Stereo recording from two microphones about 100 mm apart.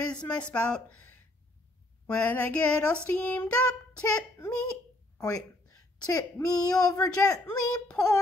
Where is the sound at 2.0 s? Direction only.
15° left (ahead or behind).